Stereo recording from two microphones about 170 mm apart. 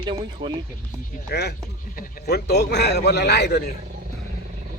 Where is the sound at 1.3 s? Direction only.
75° left (ahead or behind).